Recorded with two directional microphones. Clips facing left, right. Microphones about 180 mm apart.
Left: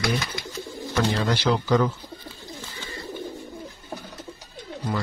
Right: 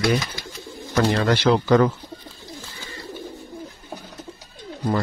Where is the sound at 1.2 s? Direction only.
60° right (ahead or behind).